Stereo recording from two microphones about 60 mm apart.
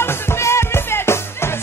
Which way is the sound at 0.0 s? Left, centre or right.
Left.